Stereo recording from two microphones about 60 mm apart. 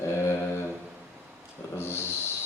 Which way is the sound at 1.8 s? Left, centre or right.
Left.